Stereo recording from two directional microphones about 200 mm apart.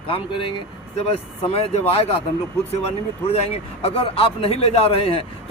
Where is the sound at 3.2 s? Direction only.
30° left (ahead or behind).